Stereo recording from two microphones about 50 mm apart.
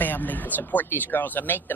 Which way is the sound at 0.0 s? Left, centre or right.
Left.